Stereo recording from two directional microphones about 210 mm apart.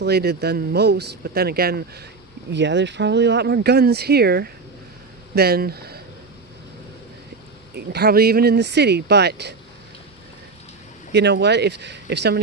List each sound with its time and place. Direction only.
0.0 s speech: 50° right (ahead or behind)
7.8 s speech: 50° right (ahead or behind)
11.1 s speech: 55° right (ahead or behind)